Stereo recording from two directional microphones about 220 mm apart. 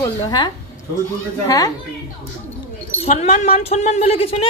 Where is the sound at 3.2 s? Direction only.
30° left (ahead or behind).